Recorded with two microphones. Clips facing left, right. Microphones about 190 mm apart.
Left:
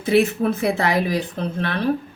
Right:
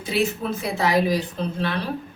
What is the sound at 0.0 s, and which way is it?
Speech, 55° left (ahead or behind).